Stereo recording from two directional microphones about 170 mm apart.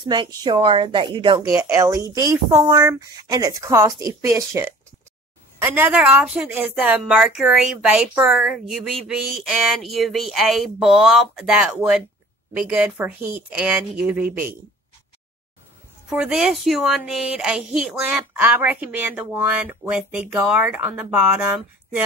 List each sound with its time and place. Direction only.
0.0 s a woman's voice: 25° right (ahead or behind); by 14.5 s 10° right (ahead or behind)
16.1 s speech: 5° right (ahead or behind)